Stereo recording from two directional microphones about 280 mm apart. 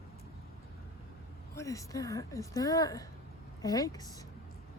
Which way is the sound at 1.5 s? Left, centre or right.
Centre.